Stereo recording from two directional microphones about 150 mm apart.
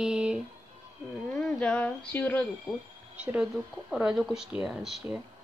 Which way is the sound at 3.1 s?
5° right (ahead or behind).